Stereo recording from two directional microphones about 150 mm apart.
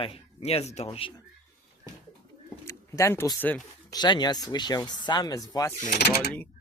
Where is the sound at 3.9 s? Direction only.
30° left (ahead or behind).